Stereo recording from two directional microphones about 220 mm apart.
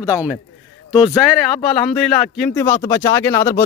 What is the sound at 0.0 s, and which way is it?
Speech, 15° left (ahead or behind).